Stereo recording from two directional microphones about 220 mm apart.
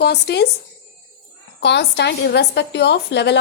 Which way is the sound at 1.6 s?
50° left (ahead or behind).